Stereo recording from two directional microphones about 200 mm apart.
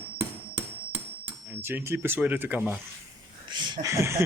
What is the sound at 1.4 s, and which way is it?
Speech, 10° right (ahead or behind).